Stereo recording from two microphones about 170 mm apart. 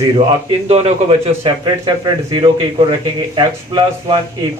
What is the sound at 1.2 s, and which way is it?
A man's voice, 30° right (ahead or behind).